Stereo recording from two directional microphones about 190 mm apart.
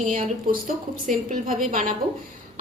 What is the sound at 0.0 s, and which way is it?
A woman's voice, 45° right (ahead or behind).